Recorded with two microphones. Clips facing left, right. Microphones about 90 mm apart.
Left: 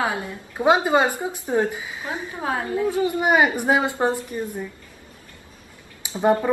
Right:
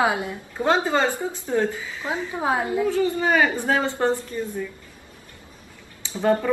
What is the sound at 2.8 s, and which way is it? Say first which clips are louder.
Speech: left 3 dB; 15° left (ahead or behind).